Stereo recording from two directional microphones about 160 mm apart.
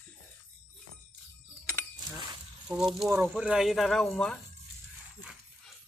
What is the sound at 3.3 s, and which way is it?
Speech, 5° right (ahead or behind).